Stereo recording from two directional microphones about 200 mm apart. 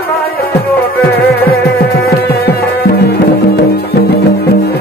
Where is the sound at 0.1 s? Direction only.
50° left (ahead or behind).